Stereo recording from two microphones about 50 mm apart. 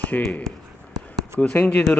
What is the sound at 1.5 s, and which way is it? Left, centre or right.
Speech, left.